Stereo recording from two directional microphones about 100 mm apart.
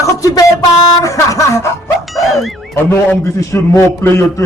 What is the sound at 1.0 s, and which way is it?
Speech, 30° left (ahead or behind).